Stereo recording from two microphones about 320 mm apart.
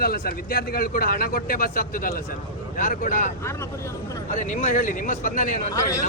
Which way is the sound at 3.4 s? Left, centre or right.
Centre.